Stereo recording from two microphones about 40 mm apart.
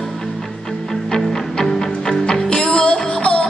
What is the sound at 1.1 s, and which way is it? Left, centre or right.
Music, centre.